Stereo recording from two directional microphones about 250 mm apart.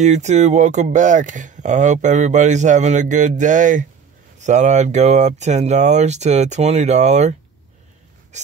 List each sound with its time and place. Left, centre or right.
0.0 s speech: right